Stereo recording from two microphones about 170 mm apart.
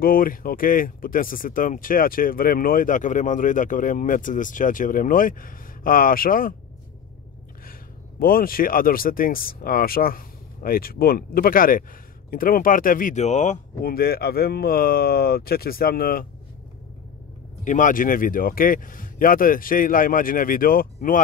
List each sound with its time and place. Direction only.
0.0 s speech: 55° left (ahead or behind)
8.2 s speech: 60° left (ahead or behind); by 13.6 s 40° left (ahead or behind)
13.7 s speech: 60° left (ahead or behind)
17.6 s speech: 50° left (ahead or behind)